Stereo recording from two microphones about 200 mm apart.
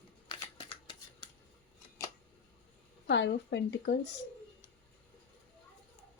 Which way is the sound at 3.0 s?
60° left (ahead or behind).